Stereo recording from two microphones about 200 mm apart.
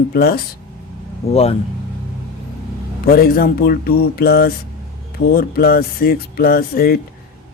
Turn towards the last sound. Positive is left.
turn(degrees=50)  # may be behind; listen again after turning